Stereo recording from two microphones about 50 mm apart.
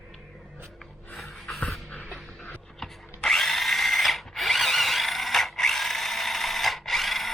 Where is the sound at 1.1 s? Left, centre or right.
Centre.